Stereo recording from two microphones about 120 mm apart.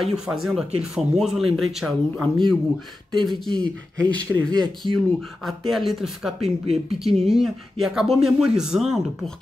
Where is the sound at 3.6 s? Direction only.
10° left (ahead or behind).